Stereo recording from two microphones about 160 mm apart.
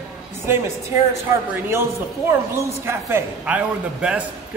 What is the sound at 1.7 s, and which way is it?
A man's voice, 15° right (ahead or behind).